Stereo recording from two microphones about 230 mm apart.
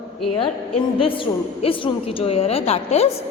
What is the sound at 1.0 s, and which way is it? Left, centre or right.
A woman's voice, left.